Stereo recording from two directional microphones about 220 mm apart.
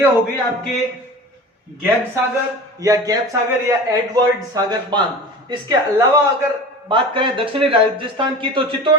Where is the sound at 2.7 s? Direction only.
15° right (ahead or behind).